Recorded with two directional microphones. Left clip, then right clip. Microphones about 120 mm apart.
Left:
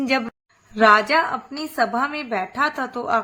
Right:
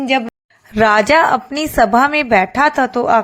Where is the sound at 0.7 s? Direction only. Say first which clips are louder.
Right 4 dB; 70° right (ahead or behind).